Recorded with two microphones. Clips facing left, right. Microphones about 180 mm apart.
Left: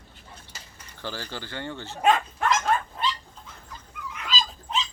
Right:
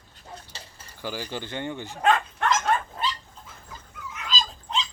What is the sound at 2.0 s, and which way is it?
Dog, centre (ahead or behind).